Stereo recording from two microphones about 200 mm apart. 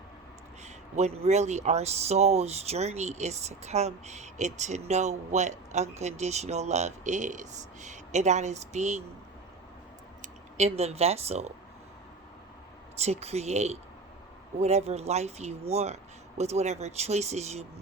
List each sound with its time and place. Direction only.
0.6 s speech: 35° right (ahead or behind)
10.2 s speech: 35° right (ahead or behind)
13.0 s speech: 30° right (ahead or behind)